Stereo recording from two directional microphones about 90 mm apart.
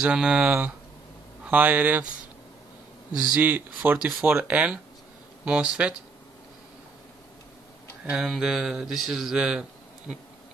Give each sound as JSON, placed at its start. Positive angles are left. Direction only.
{"t": 0.0, "sound": "speech", "side_deg": -10}
{"t": 3.3, "sound": "speech", "side_deg": -20}
{"t": 8.0, "sound": "speech", "side_deg": -5}